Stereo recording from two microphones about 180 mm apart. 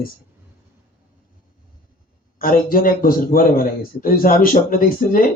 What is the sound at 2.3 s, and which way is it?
A man's voice, 50° left (ahead or behind).